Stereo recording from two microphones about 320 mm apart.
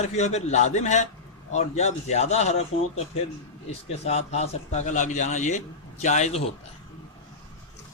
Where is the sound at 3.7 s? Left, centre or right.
Centre.